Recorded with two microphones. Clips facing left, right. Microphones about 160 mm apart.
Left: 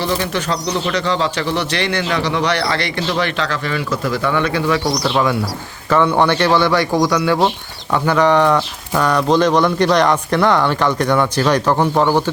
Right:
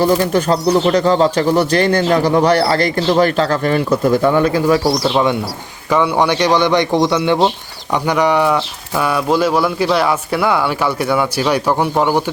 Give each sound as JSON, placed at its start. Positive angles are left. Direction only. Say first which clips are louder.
{"t": 0.0, "sound": "speech", "louder": "right 6 dB", "side_deg": -45}
{"t": 4.8, "sound": "speech", "louder": "right 4 dB", "side_deg": 0}
{"t": 5.0, "sound": "a man's voice", "louder": "right 2 dB", "side_deg": -20}